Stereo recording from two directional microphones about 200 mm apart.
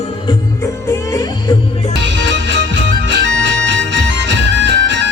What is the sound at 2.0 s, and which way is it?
Music, 60° right (ahead or behind).